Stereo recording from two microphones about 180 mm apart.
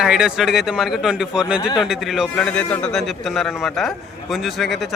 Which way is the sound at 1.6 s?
25° left (ahead or behind).